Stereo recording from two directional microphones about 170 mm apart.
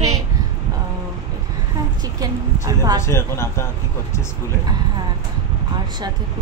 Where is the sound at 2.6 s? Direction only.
20° right (ahead or behind).